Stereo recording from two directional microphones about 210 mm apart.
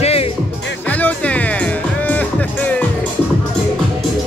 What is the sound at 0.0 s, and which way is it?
Music, 30° left (ahead or behind).